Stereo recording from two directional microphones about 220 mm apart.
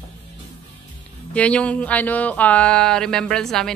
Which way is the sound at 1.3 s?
5° left (ahead or behind).